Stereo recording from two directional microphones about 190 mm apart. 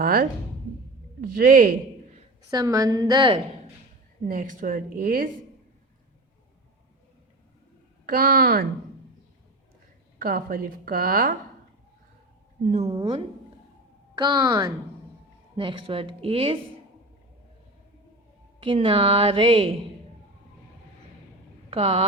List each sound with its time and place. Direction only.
0.0 s a woman's voice: 50° right (ahead or behind)
2.5 s a woman's voice: 20° right (ahead or behind)
4.3 s a woman's voice: 45° right (ahead or behind)
8.0 s a woman's voice: 50° right (ahead or behind)
10.2 s a woman's voice: 50° right (ahead or behind)
12.7 s a woman's voice: 30° right (ahead or behind)
18.6 s a woman's voice: 25° right (ahead or behind)
21.7 s speech: 30° right (ahead or behind)